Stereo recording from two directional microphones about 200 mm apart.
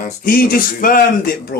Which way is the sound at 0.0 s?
45° left (ahead or behind).